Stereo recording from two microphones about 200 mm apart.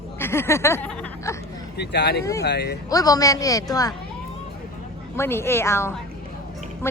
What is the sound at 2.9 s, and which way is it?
A woman's voice, 20° left (ahead or behind).